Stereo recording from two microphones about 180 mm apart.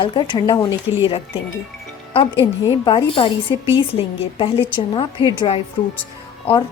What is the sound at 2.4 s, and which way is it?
A woman's voice, 30° left (ahead or behind).